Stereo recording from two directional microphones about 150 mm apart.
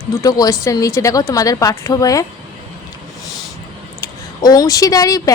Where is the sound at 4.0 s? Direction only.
25° left (ahead or behind).